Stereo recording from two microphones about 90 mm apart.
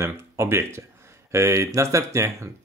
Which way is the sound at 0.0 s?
30° right (ahead or behind).